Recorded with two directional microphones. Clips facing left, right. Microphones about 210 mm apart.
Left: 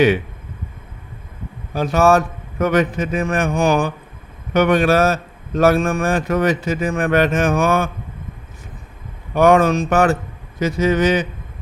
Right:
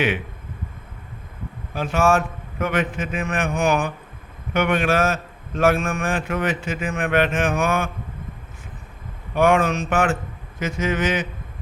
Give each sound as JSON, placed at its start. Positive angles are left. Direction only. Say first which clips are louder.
{"t": 1.7, "sound": "a man's voice", "louder": "left 5 dB", "side_deg": 40}
{"t": 9.3, "sound": "a man's voice", "louder": "left 5 dB", "side_deg": 40}